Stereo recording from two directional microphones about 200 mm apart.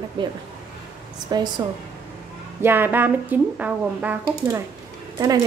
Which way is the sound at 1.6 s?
20° right (ahead or behind).